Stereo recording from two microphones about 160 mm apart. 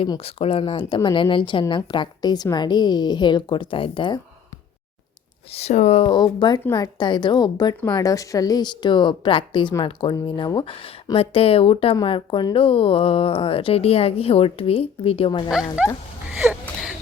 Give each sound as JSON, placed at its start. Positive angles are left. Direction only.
{"t": 0.3, "sound": "speech", "side_deg": 35}
{"t": 5.5, "sound": "speech", "side_deg": 45}
{"t": 6.1, "sound": "speech", "side_deg": 25}
{"t": 15.4, "sound": "speech", "side_deg": -5}
{"t": 16.4, "sound": "whimper", "side_deg": -10}